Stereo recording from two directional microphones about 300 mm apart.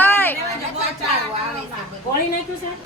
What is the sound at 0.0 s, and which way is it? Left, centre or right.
Chatter, centre.